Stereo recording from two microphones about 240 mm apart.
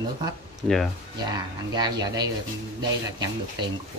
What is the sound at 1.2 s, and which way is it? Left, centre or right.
Speech, centre.